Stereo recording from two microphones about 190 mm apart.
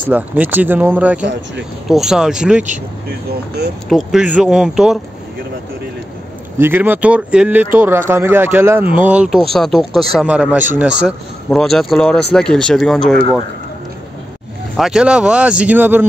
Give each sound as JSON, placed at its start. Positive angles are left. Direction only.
{"t": 0.1, "sound": "speech", "side_deg": -10}
{"t": 3.3, "sound": "speech", "side_deg": -60}
{"t": 3.9, "sound": "speech", "side_deg": -5}
{"t": 6.6, "sound": "speech", "side_deg": -10}
{"t": 14.8, "sound": "speech", "side_deg": -5}